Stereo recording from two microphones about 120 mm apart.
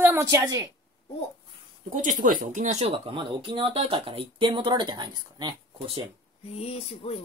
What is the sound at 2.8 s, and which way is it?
Speech, 45° right (ahead or behind).